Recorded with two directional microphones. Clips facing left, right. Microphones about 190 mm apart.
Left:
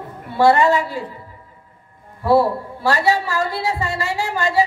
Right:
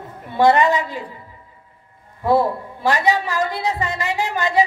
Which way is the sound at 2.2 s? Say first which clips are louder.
Left 2 dB; 20° right (ahead or behind).